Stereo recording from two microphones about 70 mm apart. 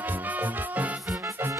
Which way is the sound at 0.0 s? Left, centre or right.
Right.